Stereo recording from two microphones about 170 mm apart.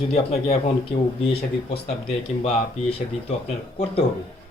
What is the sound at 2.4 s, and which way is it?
A man's voice, 35° left (ahead or behind).